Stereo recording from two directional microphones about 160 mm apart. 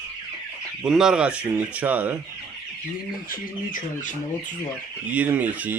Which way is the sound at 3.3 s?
55° left (ahead or behind).